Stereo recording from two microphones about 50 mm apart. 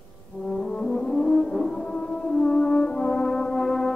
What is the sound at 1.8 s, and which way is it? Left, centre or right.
French horn, centre.